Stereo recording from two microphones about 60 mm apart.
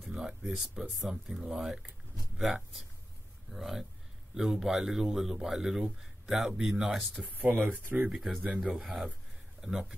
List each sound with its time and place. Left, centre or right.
0.1 s a sound: centre
0.4 s speech: centre
7.3 s speech: right
8.1 s speech: centre